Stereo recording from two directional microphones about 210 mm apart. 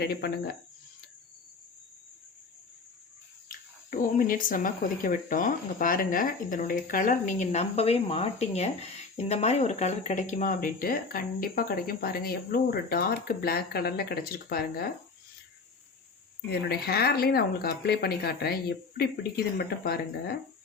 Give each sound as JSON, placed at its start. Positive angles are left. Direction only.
{"t": 0.0, "sound": "speech", "side_deg": 50}
{"t": 3.5, "sound": "speech", "side_deg": 40}
{"t": 16.5, "sound": "speech", "side_deg": 50}